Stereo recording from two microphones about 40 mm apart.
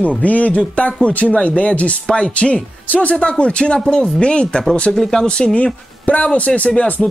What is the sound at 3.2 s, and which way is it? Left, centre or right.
Speech, left.